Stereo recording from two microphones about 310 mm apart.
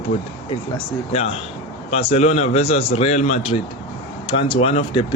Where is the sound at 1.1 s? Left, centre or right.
Centre.